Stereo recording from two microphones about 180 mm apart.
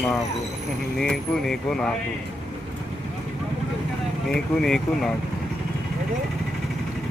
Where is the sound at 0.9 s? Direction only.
Centre (ahead or behind).